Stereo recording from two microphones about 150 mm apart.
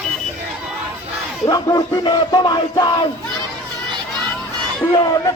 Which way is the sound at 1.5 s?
25° left (ahead or behind).